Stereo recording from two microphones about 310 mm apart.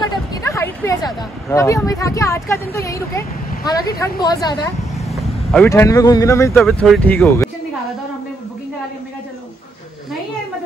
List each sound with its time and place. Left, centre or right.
0.0 s speech: centre
5.0 s speech: centre